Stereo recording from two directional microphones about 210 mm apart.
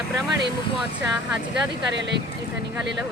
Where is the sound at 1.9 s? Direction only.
55° right (ahead or behind).